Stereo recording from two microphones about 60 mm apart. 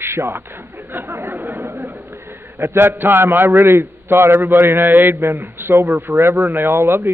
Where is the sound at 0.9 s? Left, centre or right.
Right.